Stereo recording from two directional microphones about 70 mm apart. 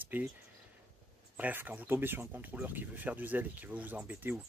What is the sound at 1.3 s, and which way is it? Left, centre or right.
Speech, right.